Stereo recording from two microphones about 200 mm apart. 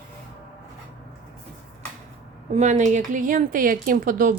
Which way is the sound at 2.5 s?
35° right (ahead or behind).